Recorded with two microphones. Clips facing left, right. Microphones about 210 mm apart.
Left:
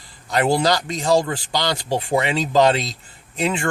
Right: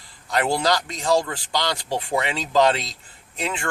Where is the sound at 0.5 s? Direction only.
25° left (ahead or behind).